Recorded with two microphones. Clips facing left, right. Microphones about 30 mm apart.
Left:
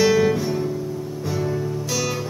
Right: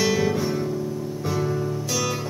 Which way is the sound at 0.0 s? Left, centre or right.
Centre.